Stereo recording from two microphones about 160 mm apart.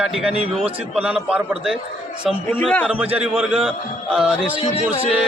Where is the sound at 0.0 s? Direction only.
5° right (ahead or behind).